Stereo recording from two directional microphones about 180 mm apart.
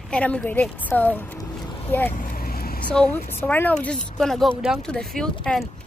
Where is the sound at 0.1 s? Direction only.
5° left (ahead or behind).